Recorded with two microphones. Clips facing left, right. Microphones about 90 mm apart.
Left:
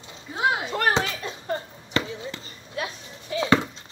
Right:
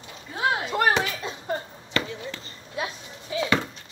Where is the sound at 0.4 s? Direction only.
20° left (ahead or behind).